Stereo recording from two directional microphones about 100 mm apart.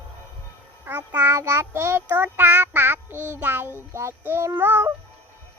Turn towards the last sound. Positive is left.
turn(degrees=-20)  # may be behind; listen again after turning